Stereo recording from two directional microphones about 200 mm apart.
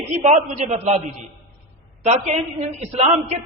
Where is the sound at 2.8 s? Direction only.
35° right (ahead or behind).